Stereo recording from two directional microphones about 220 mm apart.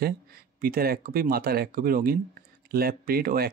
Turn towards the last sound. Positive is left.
turn(degrees=-45)  # may be behind; listen again after turning